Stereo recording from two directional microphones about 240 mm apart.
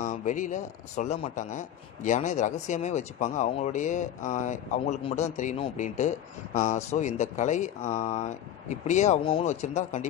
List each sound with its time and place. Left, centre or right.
0.0 s a man's voice: left